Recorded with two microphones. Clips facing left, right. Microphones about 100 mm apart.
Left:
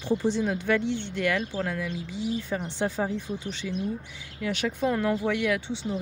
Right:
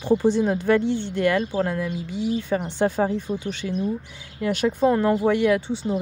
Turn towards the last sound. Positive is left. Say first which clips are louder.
# right 7 dB
turn(degrees=-45)  # may be behind; listen again after turning